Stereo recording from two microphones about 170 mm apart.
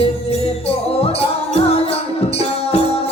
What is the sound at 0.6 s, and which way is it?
Music, 35° left (ahead or behind).